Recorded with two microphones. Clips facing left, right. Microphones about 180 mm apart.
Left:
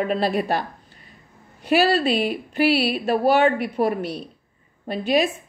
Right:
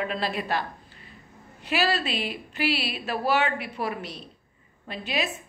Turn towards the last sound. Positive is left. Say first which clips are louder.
# left 10 dB
turn(degrees=50)  # may be behind; listen again after turning